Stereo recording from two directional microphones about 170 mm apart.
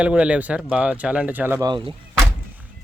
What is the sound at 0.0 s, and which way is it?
Speech, 5° right (ahead or behind).